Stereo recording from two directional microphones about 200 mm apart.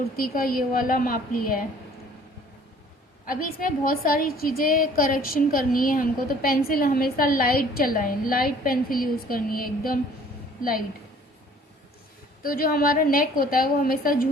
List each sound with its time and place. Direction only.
0.2 s a woman's voice: 45° left (ahead or behind)
3.2 s a woman's voice: 45° left (ahead or behind)
12.4 s a woman's voice: 45° left (ahead or behind)